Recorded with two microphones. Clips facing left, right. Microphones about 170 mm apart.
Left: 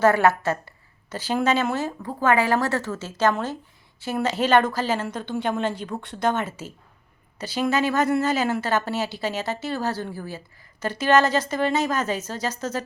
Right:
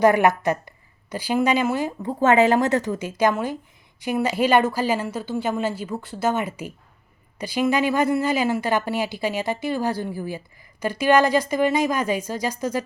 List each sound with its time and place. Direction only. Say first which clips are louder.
0.0 s a woman's voice: right 2 dB; 15° right (ahead or behind)
2.0 s a woman's voice: right 4 dB; 25° right (ahead or behind)